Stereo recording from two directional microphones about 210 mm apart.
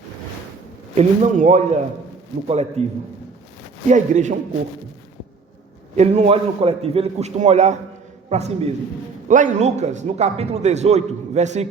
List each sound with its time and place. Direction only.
0.9 s a man's voice: 35° right (ahead or behind)
3.8 s a man's voice: 35° right (ahead or behind)
6.0 s a man's voice: 30° right (ahead or behind)